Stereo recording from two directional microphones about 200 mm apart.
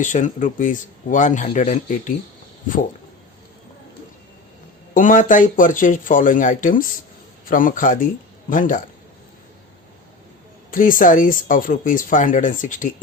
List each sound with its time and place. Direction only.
0.0 s speech: 40° left (ahead or behind)
4.9 s a man's voice: 40° left (ahead or behind)
10.7 s speech: 45° left (ahead or behind)